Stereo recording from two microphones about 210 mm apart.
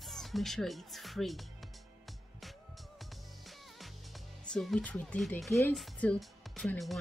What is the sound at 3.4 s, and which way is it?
Music, centre (ahead or behind).